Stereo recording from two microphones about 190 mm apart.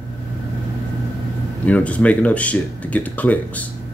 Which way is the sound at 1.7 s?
5° left (ahead or behind).